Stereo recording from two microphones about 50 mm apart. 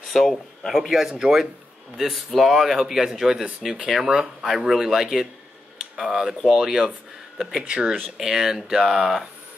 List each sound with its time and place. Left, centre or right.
0.0 s speech: centre; by 7.9 s right
8.2 s speech: centre